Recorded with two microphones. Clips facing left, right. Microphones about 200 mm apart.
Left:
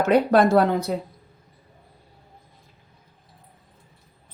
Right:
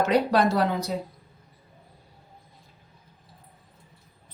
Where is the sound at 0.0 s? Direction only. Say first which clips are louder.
Left 4 dB; 55° left (ahead or behind).